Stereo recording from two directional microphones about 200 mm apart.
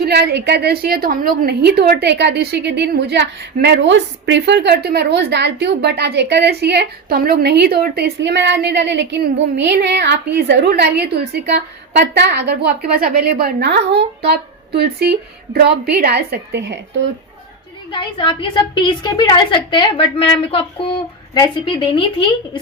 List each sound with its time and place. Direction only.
0.0 s a woman's voice: 55° right (ahead or behind)
17.9 s a woman's voice: 25° left (ahead or behind)